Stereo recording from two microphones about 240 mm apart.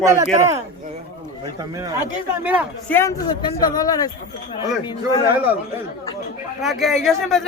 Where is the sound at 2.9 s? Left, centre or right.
Centre.